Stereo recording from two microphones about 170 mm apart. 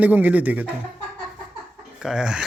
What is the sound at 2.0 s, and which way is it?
Speech, 5° right (ahead or behind).